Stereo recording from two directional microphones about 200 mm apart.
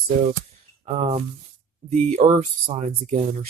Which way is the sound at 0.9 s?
35° right (ahead or behind).